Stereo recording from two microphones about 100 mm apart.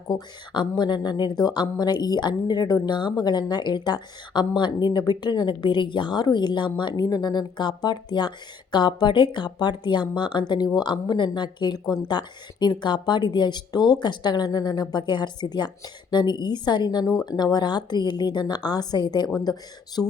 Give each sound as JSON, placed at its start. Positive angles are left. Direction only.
{"t": 0.1, "sound": "a woman's voice", "side_deg": 50}
{"t": 20.0, "sound": "speech", "side_deg": 25}